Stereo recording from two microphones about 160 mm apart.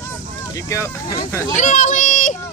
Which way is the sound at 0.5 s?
20° left (ahead or behind).